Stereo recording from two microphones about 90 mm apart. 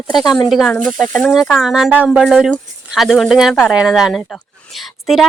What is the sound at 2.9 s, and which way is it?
Speech, centre (ahead or behind).